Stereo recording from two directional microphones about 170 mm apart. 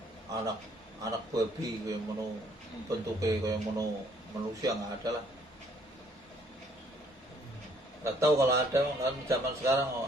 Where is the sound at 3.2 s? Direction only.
20° right (ahead or behind).